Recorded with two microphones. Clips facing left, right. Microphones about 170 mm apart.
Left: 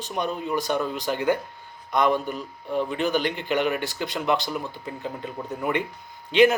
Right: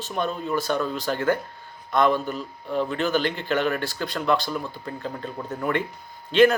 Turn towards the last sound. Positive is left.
turn(degrees=15)  # may be behind; listen again after turning